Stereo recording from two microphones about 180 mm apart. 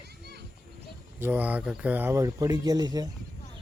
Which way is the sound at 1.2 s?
10° right (ahead or behind).